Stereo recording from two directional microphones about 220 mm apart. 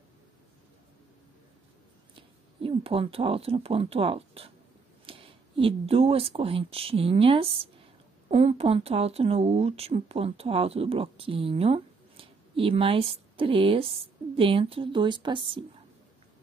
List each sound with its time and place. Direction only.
2.1 s speech: 25° right (ahead or behind)